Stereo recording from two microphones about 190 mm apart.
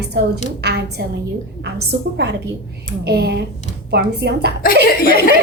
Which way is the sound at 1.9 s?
65° right (ahead or behind).